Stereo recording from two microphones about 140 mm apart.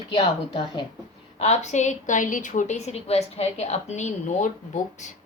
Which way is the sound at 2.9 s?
45° left (ahead or behind).